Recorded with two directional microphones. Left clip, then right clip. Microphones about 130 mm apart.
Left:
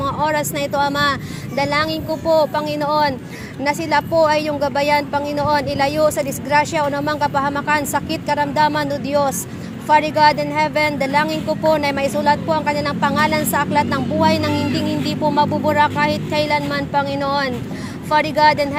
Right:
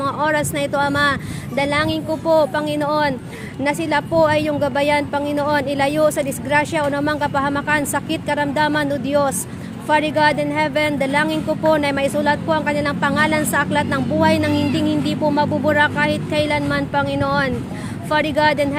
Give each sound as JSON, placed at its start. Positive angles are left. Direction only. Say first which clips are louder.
{"t": 0.0, "sound": "speech", "louder": "even", "side_deg": -40}